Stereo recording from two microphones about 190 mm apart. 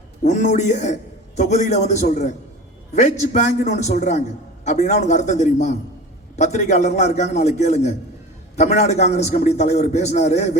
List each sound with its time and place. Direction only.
0.2 s a man's voice: 40° left (ahead or behind)